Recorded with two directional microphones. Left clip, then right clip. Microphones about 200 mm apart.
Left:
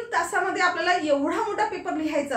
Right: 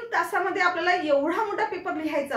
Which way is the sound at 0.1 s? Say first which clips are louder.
Even; centre (ahead or behind).